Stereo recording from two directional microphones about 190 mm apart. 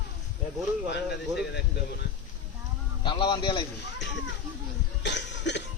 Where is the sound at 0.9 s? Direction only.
60° left (ahead or behind).